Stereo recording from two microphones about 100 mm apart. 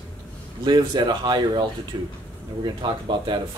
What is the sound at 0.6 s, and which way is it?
Speech, 45° right (ahead or behind).